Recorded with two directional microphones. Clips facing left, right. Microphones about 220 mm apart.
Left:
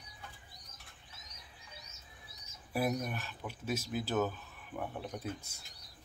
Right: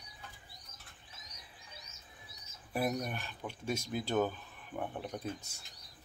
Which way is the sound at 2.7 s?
5° left (ahead or behind).